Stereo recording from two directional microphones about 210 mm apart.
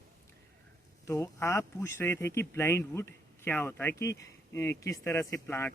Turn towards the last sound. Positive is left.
turn(degrees=10)  # may be behind; listen again after turning